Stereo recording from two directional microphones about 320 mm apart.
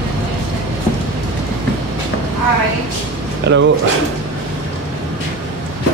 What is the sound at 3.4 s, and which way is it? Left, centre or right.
Speech, right.